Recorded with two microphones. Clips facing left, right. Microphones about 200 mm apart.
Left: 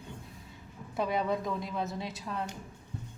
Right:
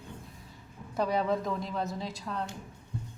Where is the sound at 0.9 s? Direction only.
Centre (ahead or behind).